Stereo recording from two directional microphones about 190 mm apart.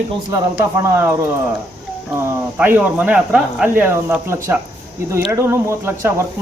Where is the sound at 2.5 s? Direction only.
10° right (ahead or behind).